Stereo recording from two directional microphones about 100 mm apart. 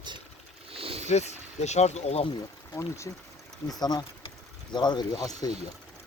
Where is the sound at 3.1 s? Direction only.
30° left (ahead or behind).